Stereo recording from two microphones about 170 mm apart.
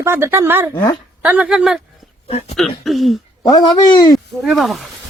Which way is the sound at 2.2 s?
40° left (ahead or behind).